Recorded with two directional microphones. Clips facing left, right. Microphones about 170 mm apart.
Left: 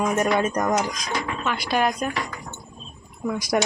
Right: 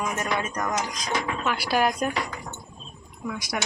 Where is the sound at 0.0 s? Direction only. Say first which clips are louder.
Left 7 dB; 35° left (ahead or behind).